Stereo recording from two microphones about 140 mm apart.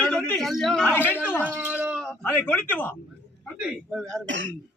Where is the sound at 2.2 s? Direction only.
15° left (ahead or behind).